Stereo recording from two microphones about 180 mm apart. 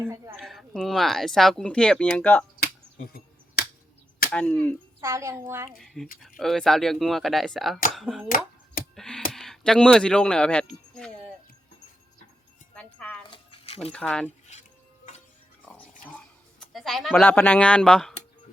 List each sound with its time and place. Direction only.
0.0 s a child's voice: 15° right (ahead or behind)
0.3 s speech: centre (ahead or behind)
2.6 s finger snapping: 60° left (ahead or behind)
4.3 s speech: 5° left (ahead or behind)
4.9 s a child's voice: 15° right (ahead or behind)
5.8 s speech: centre (ahead or behind)
9.0 s a sound: 5° left (ahead or behind)
9.3 s speech: centre (ahead or behind)
12.7 s music: 10° left (ahead or behind)
13.3 s a sound: 30° left (ahead or behind)
13.9 s speech: 5° left (ahead or behind)
15.6 s a sound: 10° left (ahead or behind)